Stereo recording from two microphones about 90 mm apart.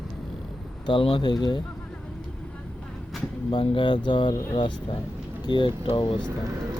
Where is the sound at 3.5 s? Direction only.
65° left (ahead or behind).